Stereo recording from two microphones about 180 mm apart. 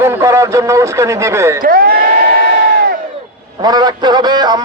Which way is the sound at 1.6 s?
55° right (ahead or behind).